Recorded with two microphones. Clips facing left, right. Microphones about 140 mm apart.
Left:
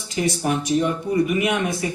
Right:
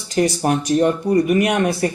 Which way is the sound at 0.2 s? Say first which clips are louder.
Right 5 dB; 60° right (ahead or behind).